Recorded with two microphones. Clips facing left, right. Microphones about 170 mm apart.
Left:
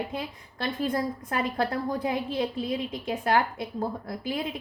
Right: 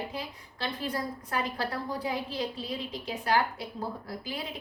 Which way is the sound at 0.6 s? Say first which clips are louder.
Left 5 dB; 45° left (ahead or behind).